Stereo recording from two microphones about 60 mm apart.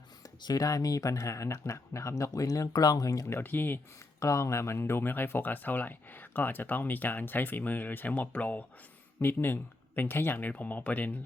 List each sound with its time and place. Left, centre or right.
0.5 s speech: left
3.2 s speech: left
4.2 s speech: left